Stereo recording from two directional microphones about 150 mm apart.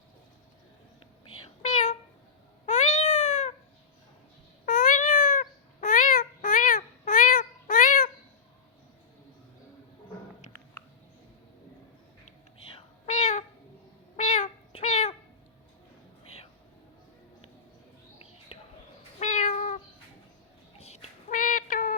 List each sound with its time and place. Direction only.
1.3 s cat: 40° left (ahead or behind)
4.6 s cat: 65° left (ahead or behind)
12.6 s cat: 40° left (ahead or behind)
14.7 s a sound: 45° left (ahead or behind)
16.2 s whispering: 40° left (ahead or behind)
18.5 s a sound: 40° left (ahead or behind)
19.2 s cat: 55° left (ahead or behind)
20.7 s dog: 45° left (ahead or behind)
21.3 s female singing: 65° left (ahead or behind)